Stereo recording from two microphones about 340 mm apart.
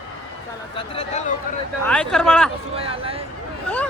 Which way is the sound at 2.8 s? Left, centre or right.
Centre.